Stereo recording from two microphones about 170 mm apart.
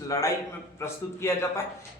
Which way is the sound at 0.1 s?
20° left (ahead or behind).